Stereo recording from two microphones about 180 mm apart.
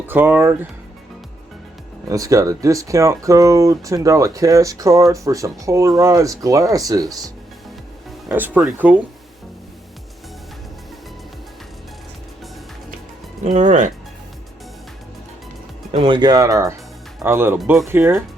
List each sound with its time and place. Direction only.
0.1 s speech: 10° right (ahead or behind)
2.0 s speech: 20° right (ahead or behind)
8.3 s speech: 10° right (ahead or behind)
13.4 s speech: 40° right (ahead or behind)
15.9 s speech: 30° right (ahead or behind); by 18.2 s 10° right (ahead or behind)